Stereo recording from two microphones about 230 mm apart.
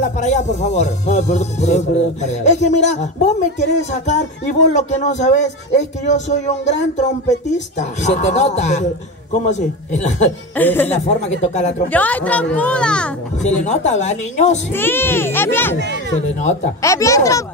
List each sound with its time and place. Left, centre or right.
0.0 s music: left
10.5 s a child's voice: centre
11.2 s music: left
11.9 s a child's voice: centre
13.4 s music: left
14.7 s a child's voice: centre
16.8 s a child's voice: centre